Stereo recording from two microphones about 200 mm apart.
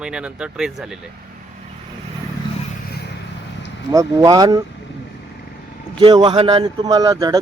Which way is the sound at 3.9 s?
15° right (ahead or behind).